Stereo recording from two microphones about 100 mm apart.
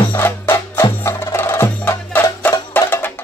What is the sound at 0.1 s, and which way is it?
Music, 25° left (ahead or behind).